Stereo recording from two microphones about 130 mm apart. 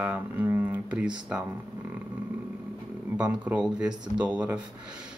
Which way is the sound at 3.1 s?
10° right (ahead or behind).